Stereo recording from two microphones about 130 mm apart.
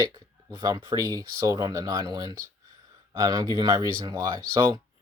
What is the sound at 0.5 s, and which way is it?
Speech, 25° right (ahead or behind).